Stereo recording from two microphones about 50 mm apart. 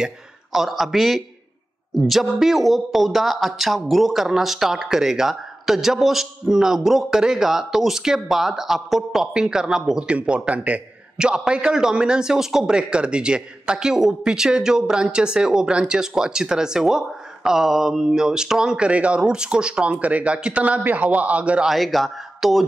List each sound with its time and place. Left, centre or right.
0.0 s a man's voice: centre; by 10.8 s right
11.1 s a man's voice: centre
18.9 s a man's voice: right
20.0 s a man's voice: right
21.6 s speech: centre